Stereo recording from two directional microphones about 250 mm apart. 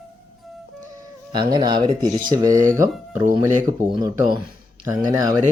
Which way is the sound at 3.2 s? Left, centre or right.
Right.